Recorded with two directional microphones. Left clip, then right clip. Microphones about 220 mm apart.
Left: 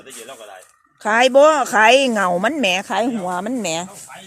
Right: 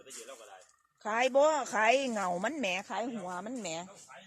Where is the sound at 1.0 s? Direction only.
15° left (ahead or behind).